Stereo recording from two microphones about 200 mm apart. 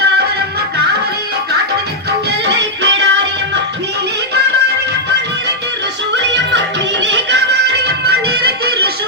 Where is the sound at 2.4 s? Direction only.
60° right (ahead or behind).